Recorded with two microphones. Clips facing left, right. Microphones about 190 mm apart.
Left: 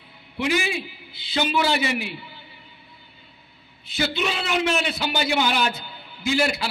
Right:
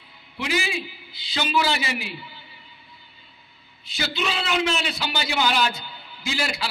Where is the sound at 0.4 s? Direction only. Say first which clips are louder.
Left 3 dB; 55° left (ahead or behind).